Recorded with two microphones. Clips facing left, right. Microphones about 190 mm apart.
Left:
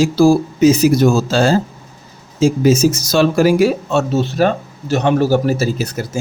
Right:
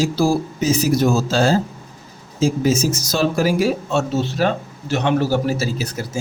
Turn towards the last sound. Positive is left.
turn(degrees=50)  # may be behind; listen again after turning